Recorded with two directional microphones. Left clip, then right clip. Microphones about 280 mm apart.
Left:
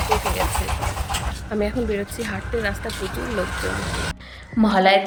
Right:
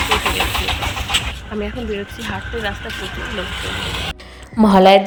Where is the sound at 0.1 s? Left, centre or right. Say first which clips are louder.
Right 2 dB; left.